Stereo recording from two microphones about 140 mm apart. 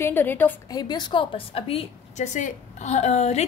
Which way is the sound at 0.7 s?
30° left (ahead or behind).